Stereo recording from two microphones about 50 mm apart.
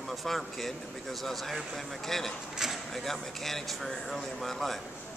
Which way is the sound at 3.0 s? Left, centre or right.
Centre.